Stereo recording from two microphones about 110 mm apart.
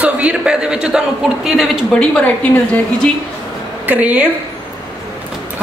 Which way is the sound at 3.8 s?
15° right (ahead or behind).